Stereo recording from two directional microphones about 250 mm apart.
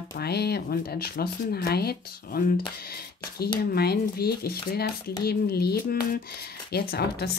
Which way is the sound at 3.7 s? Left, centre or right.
Left.